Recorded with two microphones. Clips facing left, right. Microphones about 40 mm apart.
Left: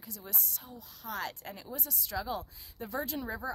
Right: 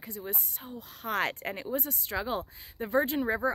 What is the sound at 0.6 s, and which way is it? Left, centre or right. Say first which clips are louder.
Speech: right 11 dB; right.